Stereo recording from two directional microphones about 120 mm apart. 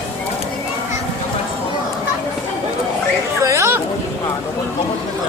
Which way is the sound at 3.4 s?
25° right (ahead or behind).